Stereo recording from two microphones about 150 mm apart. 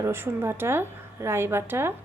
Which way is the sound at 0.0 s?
15° right (ahead or behind).